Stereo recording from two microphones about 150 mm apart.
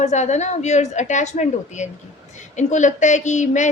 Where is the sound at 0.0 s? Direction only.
50° left (ahead or behind).